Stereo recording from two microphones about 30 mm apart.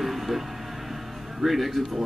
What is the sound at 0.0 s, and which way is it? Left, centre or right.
Music, centre.